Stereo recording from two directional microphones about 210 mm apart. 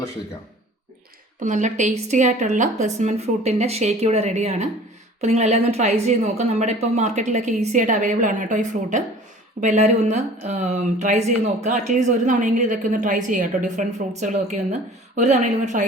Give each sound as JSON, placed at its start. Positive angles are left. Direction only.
{"t": 1.4, "sound": "speech", "side_deg": -35}